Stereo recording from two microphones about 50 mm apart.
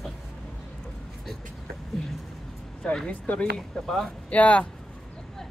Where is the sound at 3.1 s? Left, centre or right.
Left.